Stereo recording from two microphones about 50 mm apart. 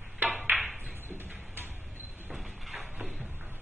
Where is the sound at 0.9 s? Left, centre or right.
Right.